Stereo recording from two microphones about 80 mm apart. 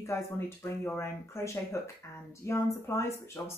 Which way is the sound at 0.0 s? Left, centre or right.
Left.